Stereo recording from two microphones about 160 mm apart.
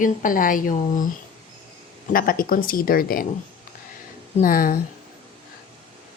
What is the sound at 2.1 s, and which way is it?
Speech, 65° left (ahead or behind).